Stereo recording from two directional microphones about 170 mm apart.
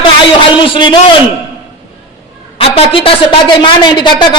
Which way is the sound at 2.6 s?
35° left (ahead or behind).